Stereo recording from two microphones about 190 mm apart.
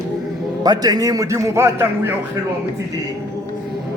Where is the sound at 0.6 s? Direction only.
20° right (ahead or behind).